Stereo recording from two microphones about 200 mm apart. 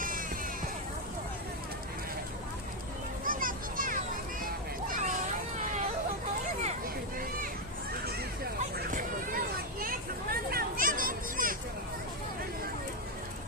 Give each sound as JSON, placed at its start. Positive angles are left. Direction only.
{"t": 0.0, "sound": "music", "side_deg": -45}
{"t": 3.2, "sound": "children playing", "side_deg": -45}
{"t": 4.4, "sound": "vehicle", "side_deg": -40}
{"t": 6.6, "sound": "a sound", "side_deg": -40}
{"t": 8.7, "sound": "hubbub", "side_deg": -40}
{"t": 9.8, "sound": "a sound", "side_deg": -45}